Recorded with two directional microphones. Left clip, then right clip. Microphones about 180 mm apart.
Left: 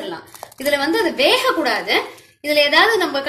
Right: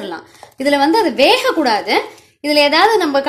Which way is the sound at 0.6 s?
55° right (ahead or behind).